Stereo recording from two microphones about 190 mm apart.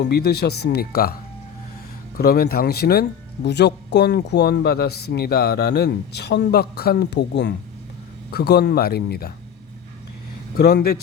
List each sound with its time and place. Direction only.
0.0 s speech: 60° left (ahead or behind)
2.1 s speech: 55° left (ahead or behind)
10.6 s speech: 55° left (ahead or behind)